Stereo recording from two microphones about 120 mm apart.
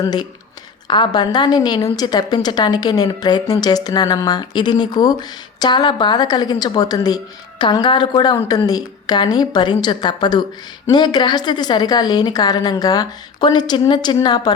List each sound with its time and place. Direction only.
0.0 s a woman's voice: 35° left (ahead or behind)